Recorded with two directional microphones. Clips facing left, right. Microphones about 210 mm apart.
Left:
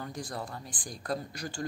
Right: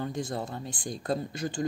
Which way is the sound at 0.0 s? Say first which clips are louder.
Right 6 dB; 25° right (ahead or behind).